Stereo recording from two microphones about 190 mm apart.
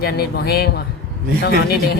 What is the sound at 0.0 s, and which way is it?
Speech, 55° left (ahead or behind).